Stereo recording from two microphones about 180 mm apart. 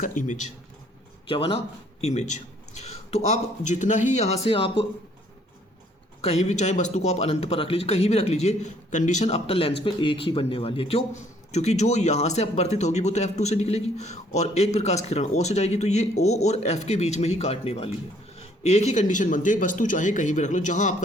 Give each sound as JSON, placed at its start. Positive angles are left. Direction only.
{"t": 0.0, "sound": "speech", "side_deg": 45}
{"t": 1.3, "sound": "a man's voice", "side_deg": 30}
{"t": 6.2, "sound": "a man's voice", "side_deg": 35}